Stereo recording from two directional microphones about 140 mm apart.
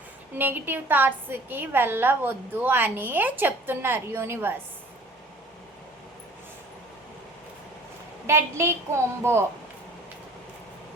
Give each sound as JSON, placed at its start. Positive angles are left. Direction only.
{"t": 0.3, "sound": "a woman's voice", "side_deg": -15}
{"t": 8.3, "sound": "a woman's voice", "side_deg": -20}